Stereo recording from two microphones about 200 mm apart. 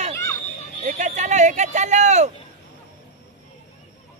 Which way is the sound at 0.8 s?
35° right (ahead or behind).